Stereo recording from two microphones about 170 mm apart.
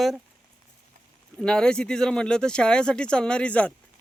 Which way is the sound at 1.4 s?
5° left (ahead or behind).